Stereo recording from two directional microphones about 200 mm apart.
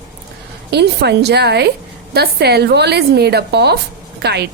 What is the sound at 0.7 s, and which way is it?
A woman's voice, 55° right (ahead or behind).